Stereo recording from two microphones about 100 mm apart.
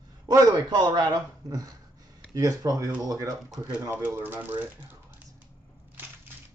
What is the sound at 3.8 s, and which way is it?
Speech, 20° right (ahead or behind).